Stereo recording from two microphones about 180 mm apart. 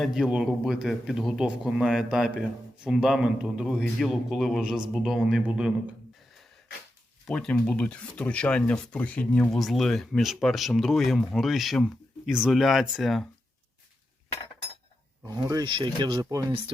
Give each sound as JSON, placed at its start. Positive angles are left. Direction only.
{"t": 0.0, "sound": "speech", "side_deg": 0}
{"t": 7.3, "sound": "speech", "side_deg": 5}
{"t": 15.2, "sound": "speech", "side_deg": -20}